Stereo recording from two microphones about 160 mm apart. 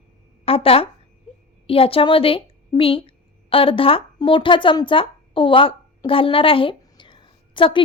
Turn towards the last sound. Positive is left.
turn(degrees=30)  # may be behind; listen again after turning